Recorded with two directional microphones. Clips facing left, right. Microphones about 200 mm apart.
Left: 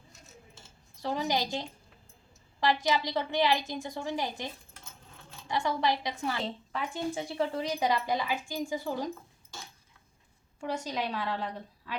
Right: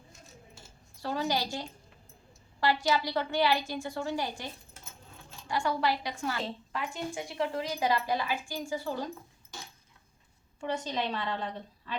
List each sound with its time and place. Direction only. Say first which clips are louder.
1.0 s a woman's voice: left 1 dB; 20° left (ahead or behind)
5.5 s a woman's voice: even; 20° left (ahead or behind)
10.7 s speech: right 1 dB; 10° left (ahead or behind)